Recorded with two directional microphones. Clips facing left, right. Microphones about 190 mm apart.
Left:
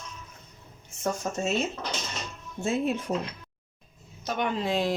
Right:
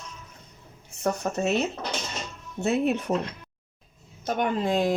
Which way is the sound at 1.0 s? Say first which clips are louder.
Right 3 dB; 65° right (ahead or behind).